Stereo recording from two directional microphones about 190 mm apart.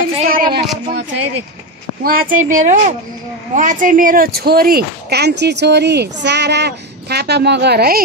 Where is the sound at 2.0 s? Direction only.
40° right (ahead or behind).